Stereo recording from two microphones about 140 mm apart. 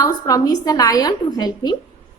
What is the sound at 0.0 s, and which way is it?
A woman's voice, 25° left (ahead or behind).